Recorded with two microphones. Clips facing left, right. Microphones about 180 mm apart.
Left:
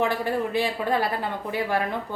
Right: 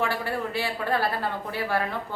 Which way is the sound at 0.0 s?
20° left (ahead or behind).